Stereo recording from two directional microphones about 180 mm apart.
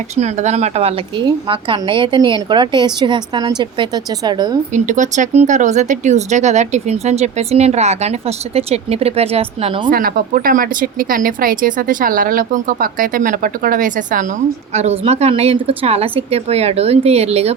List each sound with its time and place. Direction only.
0.2 s a woman's voice: 40° right (ahead or behind); by 4.5 s 20° right (ahead or behind)
4.7 s speech: 40° right (ahead or behind)
9.9 s speech: 55° right (ahead or behind); by 17.5 s 35° right (ahead or behind)